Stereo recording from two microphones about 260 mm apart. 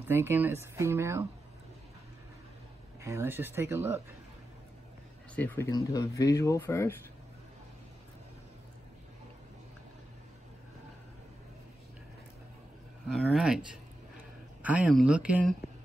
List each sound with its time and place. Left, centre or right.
0.1 s speech: centre
3.0 s speech: centre
5.3 s speech: centre
13.1 s speech: centre
14.6 s speech: centre